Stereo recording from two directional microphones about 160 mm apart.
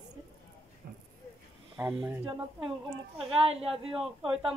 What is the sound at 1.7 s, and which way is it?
Speech, 15° right (ahead or behind).